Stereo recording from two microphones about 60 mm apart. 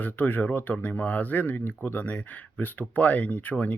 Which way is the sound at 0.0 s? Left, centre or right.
Left.